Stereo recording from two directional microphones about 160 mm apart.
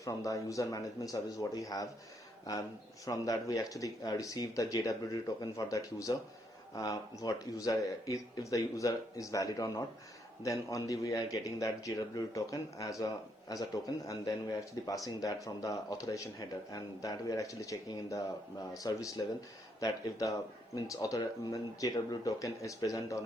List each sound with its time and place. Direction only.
0.0 s speech: 20° left (ahead or behind)